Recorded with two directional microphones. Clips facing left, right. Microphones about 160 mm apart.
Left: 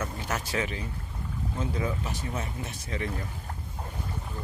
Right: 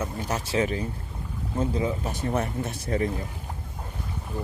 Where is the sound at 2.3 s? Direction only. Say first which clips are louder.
Right 8 dB; 55° right (ahead or behind).